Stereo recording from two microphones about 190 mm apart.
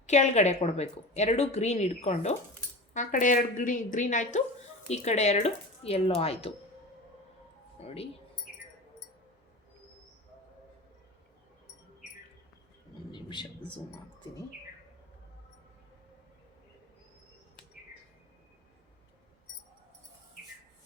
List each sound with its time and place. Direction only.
0.0 s a woman's voice: 40° left (ahead or behind)
7.8 s a woman's voice: 35° left (ahead or behind)
13.1 s a sound: 25° left (ahead or behind)